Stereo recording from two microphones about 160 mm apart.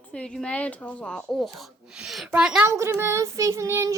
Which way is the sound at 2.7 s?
20° right (ahead or behind).